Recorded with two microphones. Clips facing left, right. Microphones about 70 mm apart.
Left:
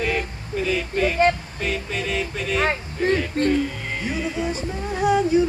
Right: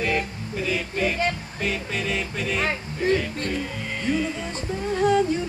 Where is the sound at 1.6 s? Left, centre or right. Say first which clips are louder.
Left 1 dB; centre.